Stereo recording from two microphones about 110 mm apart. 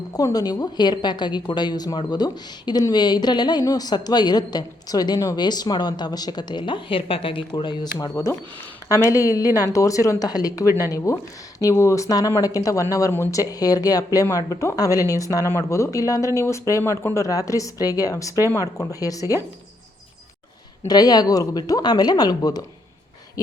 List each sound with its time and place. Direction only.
0.1 s speech: 35° left (ahead or behind)
8.1 s speech: 25° left (ahead or behind)
20.8 s speech: 35° left (ahead or behind)